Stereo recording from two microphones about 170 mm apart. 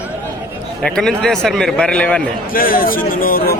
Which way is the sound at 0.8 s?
5° left (ahead or behind).